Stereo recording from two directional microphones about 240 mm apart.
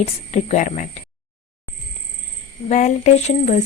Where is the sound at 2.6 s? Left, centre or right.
Left.